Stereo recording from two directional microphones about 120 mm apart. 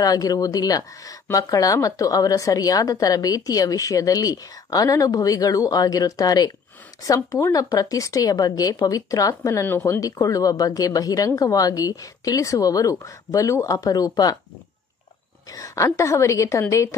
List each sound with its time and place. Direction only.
0.0 s speech: 30° left (ahead or behind)
15.5 s speech: 25° left (ahead or behind)